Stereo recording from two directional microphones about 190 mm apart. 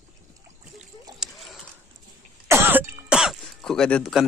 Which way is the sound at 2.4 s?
15° right (ahead or behind).